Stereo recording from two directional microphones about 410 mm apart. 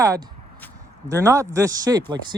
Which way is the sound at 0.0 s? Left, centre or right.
Centre.